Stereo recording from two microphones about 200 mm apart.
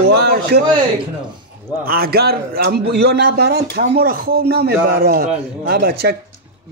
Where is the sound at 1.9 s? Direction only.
50° right (ahead or behind).